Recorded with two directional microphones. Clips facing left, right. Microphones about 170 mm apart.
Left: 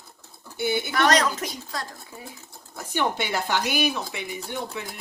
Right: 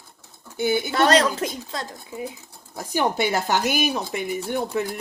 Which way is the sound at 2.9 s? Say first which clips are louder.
Right 4 dB; 45° right (ahead or behind).